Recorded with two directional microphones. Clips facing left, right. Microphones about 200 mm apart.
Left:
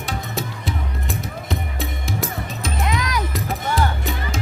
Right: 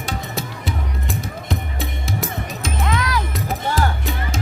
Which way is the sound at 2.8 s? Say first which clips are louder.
Right 1 dB; 15° left (ahead or behind).